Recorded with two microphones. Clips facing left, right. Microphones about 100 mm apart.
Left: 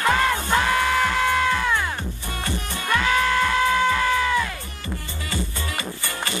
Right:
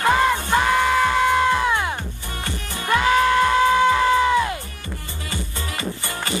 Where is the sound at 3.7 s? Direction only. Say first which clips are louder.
Right 4 dB; 20° right (ahead or behind).